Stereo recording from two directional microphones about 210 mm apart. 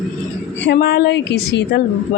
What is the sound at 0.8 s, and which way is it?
Speech, 50° left (ahead or behind).